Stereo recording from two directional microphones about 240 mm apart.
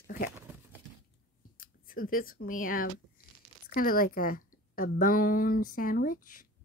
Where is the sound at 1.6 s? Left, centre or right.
Left.